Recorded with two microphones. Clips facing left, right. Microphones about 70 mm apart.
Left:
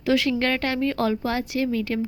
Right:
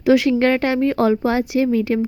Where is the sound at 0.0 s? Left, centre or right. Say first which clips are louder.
Right 7 dB; centre.